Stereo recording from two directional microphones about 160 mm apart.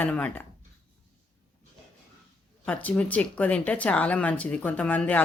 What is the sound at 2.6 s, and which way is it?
A woman's voice, 10° left (ahead or behind).